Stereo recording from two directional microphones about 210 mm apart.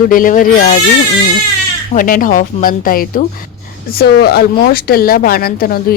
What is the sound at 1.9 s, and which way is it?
Speech, 40° left (ahead or behind).